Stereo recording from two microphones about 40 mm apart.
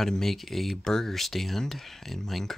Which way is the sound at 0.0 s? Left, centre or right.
Centre.